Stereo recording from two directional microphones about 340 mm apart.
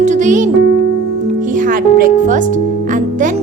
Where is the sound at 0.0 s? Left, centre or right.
Right.